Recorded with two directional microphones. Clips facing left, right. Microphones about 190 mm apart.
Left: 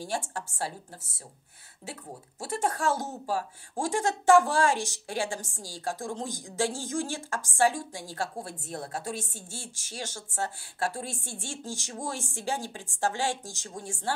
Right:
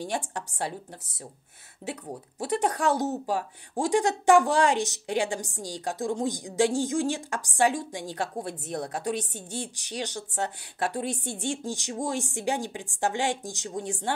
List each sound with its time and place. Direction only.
0.0 s a woman's voice: 20° right (ahead or behind)